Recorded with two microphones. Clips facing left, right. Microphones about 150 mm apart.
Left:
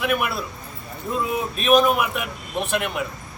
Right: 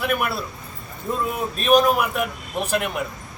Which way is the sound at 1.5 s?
Centre (ahead or behind).